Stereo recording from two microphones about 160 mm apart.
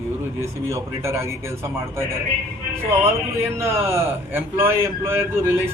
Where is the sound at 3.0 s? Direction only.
15° right (ahead or behind).